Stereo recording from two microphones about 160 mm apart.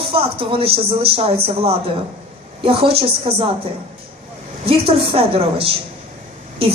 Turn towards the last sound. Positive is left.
turn(degrees=-35)  # may be behind; listen again after turning